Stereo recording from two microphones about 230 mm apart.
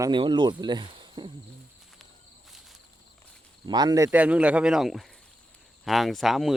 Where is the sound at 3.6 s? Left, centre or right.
Centre.